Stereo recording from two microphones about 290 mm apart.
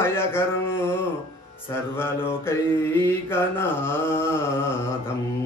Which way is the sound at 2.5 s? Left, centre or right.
Centre.